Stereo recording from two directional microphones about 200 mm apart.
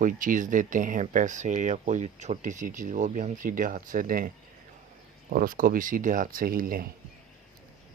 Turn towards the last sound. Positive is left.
turn(degrees=-45)  # may be behind; listen again after turning